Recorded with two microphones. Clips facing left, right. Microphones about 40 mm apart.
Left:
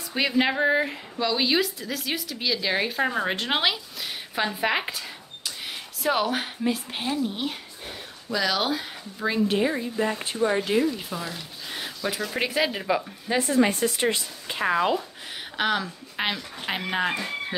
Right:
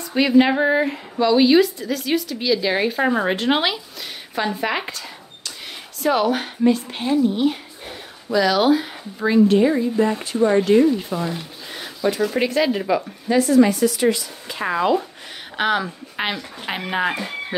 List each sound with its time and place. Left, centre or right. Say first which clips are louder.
0.1 s speech: right 8 dB; centre
9.5 s speech: right 8 dB; centre
12.4 s speech: right 6 dB; centre
13.3 s speech: right 7 dB; centre
13.7 s speech: right 6 dB; left
14.6 s speech: right 2 dB; centre
15.5 s speech: right 5 dB; centre